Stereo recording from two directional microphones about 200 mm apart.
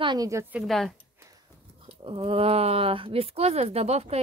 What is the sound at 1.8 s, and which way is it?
Speech, 25° right (ahead or behind).